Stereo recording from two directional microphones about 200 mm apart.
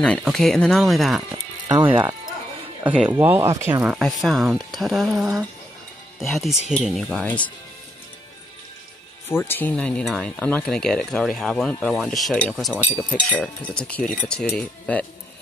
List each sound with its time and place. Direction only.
0.0 s speech: 5° left (ahead or behind)
2.8 s speech: 5° right (ahead or behind)
9.3 s speech: 10° left (ahead or behind)